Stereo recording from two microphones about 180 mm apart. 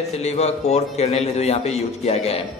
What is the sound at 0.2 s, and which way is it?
A man's voice, 35° left (ahead or behind).